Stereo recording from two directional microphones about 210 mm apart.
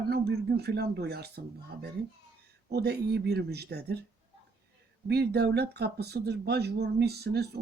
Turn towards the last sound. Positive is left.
turn(degrees=-50)  # may be behind; listen again after turning